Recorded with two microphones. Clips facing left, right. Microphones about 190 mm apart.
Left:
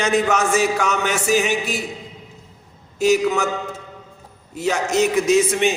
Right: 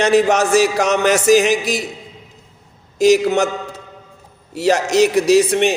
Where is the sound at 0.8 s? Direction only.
90° right.